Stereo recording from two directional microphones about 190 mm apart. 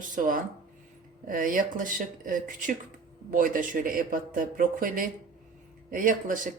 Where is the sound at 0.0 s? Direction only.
45° right (ahead or behind).